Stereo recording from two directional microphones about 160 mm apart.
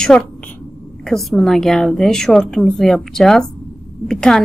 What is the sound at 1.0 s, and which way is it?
A woman's voice, centre (ahead or behind).